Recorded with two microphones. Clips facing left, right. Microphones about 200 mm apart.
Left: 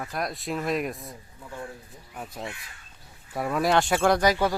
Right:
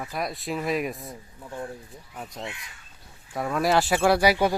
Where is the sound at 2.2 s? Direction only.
Centre (ahead or behind).